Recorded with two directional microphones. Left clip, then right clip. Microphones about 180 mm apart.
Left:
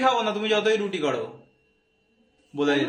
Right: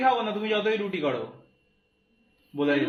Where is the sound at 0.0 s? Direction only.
15° left (ahead or behind).